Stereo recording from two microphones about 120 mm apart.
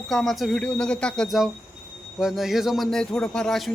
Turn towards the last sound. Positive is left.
turn(degrees=0)  # may be behind; listen again after turning